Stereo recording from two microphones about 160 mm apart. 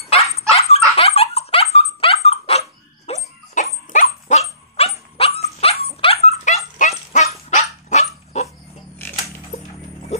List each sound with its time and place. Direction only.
0.5 s dog: 40° left (ahead or behind)